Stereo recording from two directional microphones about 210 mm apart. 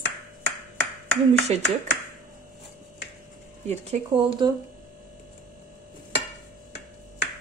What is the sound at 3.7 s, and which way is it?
Speech, 30° right (ahead or behind).